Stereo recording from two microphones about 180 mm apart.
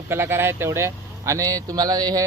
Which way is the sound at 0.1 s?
15° right (ahead or behind).